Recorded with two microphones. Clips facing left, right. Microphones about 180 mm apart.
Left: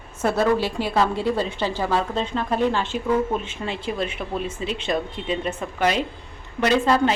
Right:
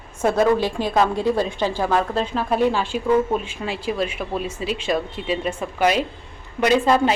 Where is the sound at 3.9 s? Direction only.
5° right (ahead or behind).